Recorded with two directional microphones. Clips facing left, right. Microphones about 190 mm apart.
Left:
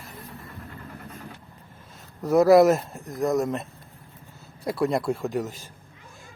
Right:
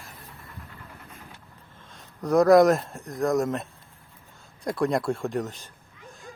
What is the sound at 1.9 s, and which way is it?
Speech, 5° left (ahead or behind).